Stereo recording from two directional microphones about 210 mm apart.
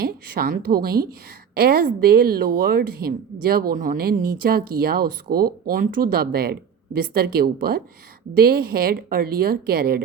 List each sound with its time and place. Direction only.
0.0 s speech: 45° right (ahead or behind)